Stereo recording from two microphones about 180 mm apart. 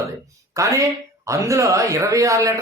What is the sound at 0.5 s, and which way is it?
Speech, 15° right (ahead or behind).